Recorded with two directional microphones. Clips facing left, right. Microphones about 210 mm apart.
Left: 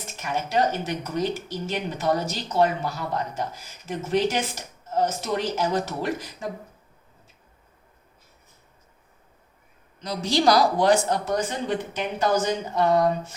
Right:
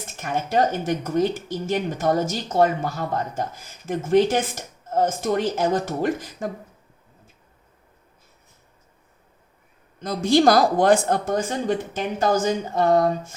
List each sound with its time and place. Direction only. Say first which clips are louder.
0.2 s speech: right 2 dB; 50° right (ahead or behind)
10.0 s speech: right 6 dB; 50° right (ahead or behind)